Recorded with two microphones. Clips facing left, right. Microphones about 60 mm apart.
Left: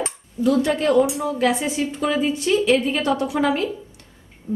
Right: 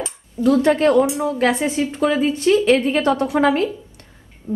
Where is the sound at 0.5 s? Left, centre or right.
Right.